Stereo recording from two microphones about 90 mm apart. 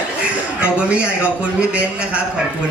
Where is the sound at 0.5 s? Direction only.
15° right (ahead or behind).